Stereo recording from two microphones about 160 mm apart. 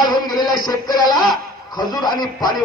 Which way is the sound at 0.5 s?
25° left (ahead or behind).